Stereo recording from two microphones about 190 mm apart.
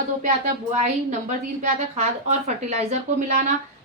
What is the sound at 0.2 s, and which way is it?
Speech, 40° right (ahead or behind).